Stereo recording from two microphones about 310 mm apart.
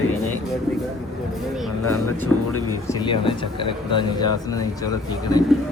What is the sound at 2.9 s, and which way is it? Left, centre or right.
Speech, centre.